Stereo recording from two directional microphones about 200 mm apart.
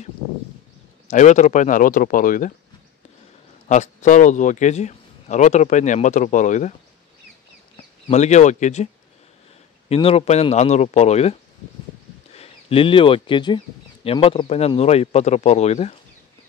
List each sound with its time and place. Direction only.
1.0 s a man's voice: 35° left (ahead or behind)
3.6 s a man's voice: 35° left (ahead or behind)
7.7 s speech: 35° left (ahead or behind)
9.8 s a man's voice: 30° left (ahead or behind)
12.4 s a man's voice: 30° left (ahead or behind)